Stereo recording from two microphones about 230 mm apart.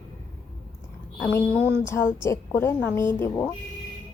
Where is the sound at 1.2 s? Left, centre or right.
Centre.